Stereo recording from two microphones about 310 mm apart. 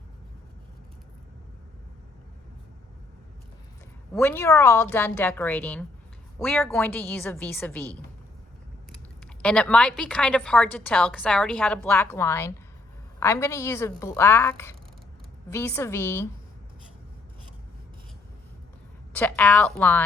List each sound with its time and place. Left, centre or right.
4.1 s a woman's voice: centre
9.2 s a woman's voice: centre
19.1 s a woman's voice: centre